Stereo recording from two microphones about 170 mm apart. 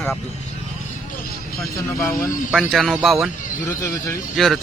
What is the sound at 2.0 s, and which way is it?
Speech, 15° left (ahead or behind).